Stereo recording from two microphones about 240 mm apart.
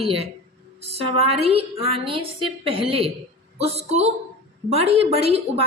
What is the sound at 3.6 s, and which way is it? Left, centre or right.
A woman's voice, right.